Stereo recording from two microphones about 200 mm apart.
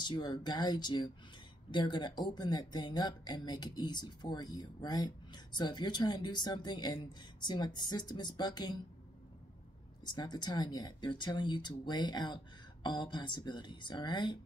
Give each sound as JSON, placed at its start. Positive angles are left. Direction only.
{"t": 0.0, "sound": "speech", "side_deg": 20}
{"t": 10.0, "sound": "speech", "side_deg": 20}